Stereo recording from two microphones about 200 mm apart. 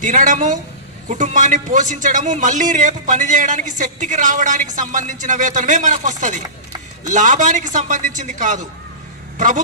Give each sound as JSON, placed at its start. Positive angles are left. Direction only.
{"t": 0.0, "sound": "a man's voice", "side_deg": -40}